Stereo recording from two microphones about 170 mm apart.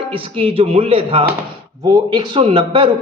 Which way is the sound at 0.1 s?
30° right (ahead or behind).